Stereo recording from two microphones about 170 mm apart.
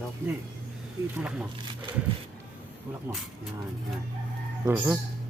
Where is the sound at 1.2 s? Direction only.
5° right (ahead or behind).